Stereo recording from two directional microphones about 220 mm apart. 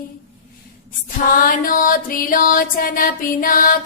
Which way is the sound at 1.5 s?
40° left (ahead or behind).